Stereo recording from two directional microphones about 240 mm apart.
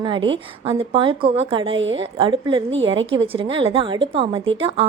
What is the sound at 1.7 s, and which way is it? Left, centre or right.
Speech, right.